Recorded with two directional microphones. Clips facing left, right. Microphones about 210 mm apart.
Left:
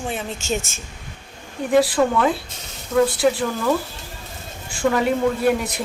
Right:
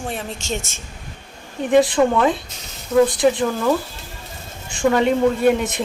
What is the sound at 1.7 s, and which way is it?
Speech, 20° right (ahead or behind).